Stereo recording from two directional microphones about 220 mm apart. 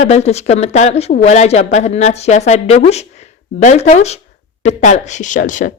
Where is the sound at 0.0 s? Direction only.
30° left (ahead or behind).